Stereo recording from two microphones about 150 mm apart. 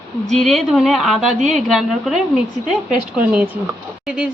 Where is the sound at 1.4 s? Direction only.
50° right (ahead or behind).